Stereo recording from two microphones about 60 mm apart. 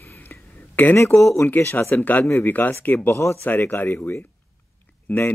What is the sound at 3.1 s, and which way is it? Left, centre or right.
Speech, left.